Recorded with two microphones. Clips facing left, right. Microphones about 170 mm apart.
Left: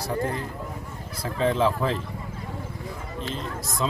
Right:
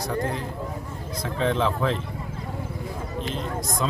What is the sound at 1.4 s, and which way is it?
Speech, 5° left (ahead or behind).